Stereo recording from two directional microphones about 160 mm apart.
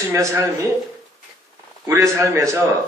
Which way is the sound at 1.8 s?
20° right (ahead or behind).